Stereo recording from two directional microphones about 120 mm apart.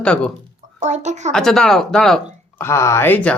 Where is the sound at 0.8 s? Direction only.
80° right.